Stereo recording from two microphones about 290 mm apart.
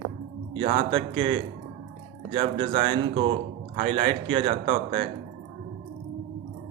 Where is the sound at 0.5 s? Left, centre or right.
Centre.